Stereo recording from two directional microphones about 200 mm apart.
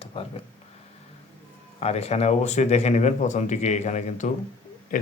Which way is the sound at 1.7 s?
30° left (ahead or behind).